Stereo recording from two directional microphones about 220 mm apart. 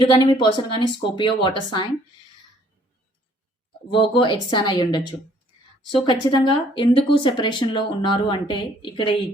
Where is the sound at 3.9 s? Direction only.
20° left (ahead or behind).